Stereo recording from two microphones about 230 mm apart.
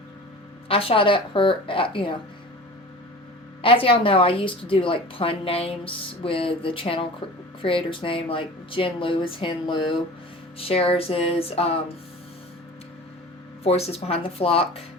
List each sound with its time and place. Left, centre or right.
0.7 s a woman's voice: left
3.6 s a woman's voice: left
13.7 s a woman's voice: left